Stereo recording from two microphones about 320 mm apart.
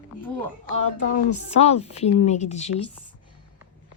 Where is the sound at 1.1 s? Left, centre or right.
Left.